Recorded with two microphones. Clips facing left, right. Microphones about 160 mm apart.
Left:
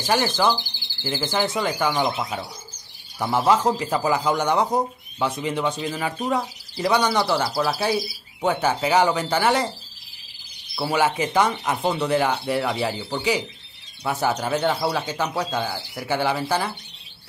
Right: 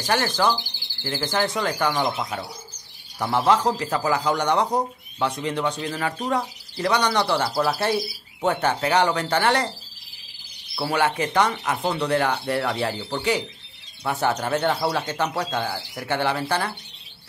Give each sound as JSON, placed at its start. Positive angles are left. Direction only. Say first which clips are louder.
{"t": 0.0, "sound": "a man's voice", "louder": "left 1 dB", "side_deg": 5}
{"t": 10.8, "sound": "a man's voice", "louder": "left 1 dB", "side_deg": 5}